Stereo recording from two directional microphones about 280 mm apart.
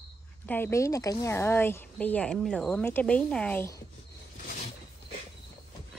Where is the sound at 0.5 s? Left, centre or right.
Centre.